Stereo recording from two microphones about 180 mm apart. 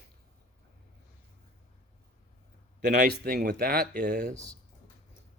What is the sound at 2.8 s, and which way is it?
Speech, 65° right (ahead or behind).